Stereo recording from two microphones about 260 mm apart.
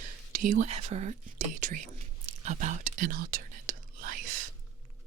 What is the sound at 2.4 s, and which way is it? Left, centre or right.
Whispering, right.